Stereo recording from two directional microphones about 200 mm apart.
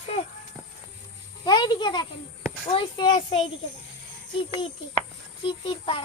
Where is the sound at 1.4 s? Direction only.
20° left (ahead or behind).